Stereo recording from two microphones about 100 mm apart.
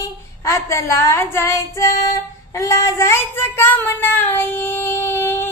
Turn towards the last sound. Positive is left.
turn(degrees=20)  # may be behind; listen again after turning